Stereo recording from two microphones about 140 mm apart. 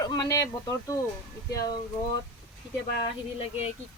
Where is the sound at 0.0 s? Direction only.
25° left (ahead or behind).